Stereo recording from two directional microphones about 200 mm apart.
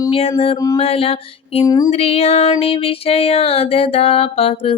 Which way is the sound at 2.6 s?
30° left (ahead or behind).